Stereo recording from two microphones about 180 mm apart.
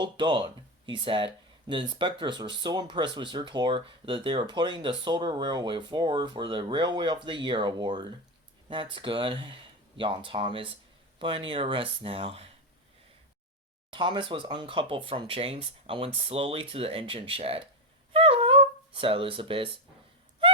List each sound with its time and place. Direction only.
0.0 s speech: 25° right (ahead or behind)
13.9 s speech: 25° right (ahead or behind)
18.1 s a sound: 30° right (ahead or behind)